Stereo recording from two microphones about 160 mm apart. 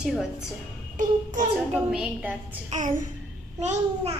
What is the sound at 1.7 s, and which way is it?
Speech, 5° right (ahead or behind).